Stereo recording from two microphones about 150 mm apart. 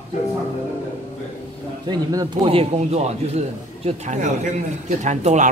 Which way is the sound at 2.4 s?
40° right (ahead or behind).